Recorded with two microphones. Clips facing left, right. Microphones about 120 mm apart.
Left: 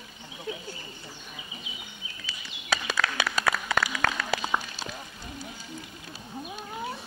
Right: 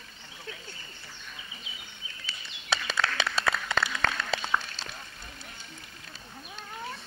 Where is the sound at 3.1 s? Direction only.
10° left (ahead or behind).